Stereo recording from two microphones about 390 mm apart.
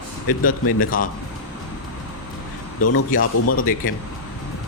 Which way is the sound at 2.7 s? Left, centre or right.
Left.